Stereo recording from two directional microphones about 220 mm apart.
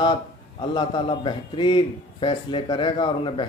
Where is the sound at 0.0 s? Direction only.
20° left (ahead or behind).